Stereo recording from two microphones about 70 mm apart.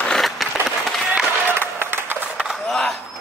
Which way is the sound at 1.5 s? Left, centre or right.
Right.